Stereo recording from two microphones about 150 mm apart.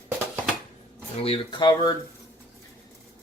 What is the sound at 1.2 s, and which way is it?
Speech, 40° left (ahead or behind).